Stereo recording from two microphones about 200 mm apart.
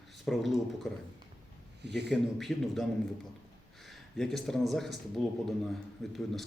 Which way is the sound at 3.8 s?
Centre (ahead or behind).